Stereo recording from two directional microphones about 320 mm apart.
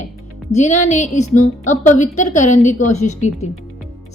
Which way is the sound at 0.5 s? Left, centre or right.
Left.